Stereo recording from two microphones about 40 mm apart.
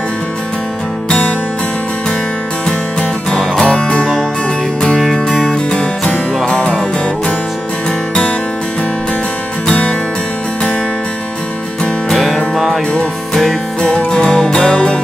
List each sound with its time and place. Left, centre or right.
2.6 s music: left
12.1 s music: centre
13.7 s music: left